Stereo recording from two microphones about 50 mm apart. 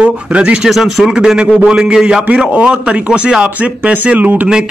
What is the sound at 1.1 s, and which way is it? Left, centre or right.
A man's voice, centre.